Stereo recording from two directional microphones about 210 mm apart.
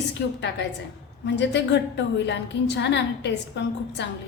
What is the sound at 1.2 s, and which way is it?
A woman's voice, 55° left (ahead or behind).